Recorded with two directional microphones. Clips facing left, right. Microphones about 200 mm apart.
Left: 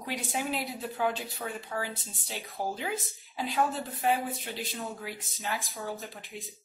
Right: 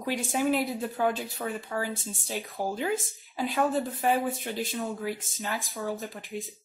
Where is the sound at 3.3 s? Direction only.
45° right (ahead or behind).